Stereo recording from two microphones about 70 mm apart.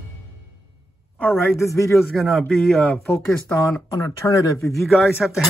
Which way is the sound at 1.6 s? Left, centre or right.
Left.